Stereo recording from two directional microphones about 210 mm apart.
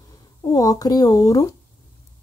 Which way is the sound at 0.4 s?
15° left (ahead or behind).